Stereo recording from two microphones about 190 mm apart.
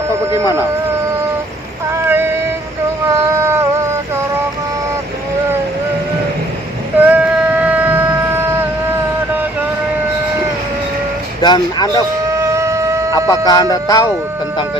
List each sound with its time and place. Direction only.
2.0 s synthetic singing: 10° right (ahead or behind)
3.1 s cat: 15° right (ahead or behind)
7.0 s a sound: 5° right (ahead or behind)
11.3 s speech: 25° left (ahead or behind)
12.4 s shofar: 15° right (ahead or behind)
13.2 s music: 20° left (ahead or behind)